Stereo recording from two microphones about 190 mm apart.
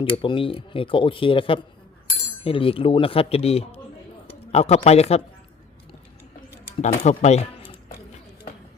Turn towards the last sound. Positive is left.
turn(degrees=30)  # may be behind; listen again after turning